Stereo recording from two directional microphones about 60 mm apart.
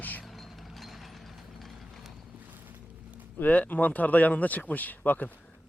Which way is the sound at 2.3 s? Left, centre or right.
Right.